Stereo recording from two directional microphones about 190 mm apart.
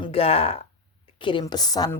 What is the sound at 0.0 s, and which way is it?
Speech, 30° left (ahead or behind).